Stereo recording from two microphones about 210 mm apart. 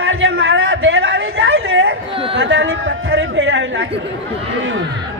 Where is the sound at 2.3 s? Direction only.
60° right (ahead or behind).